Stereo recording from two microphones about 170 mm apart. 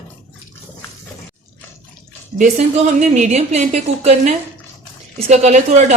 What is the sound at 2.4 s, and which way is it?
A woman's voice, 45° right (ahead or behind).